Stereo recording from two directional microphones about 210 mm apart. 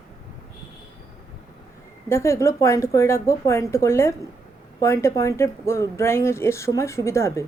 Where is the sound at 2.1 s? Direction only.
15° left (ahead or behind).